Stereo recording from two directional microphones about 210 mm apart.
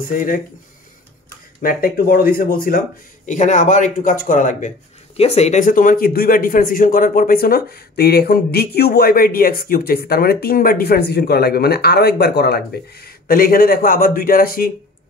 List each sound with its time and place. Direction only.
0.1 s speech: 40° left (ahead or behind)
1.6 s speech: 45° left (ahead or behind)